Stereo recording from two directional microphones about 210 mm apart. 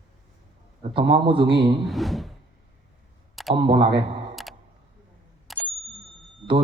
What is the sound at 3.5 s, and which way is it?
Speech, 25° right (ahead or behind).